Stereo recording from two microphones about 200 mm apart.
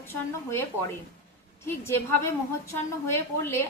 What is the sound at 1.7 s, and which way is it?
A woman's voice, 10° left (ahead or behind).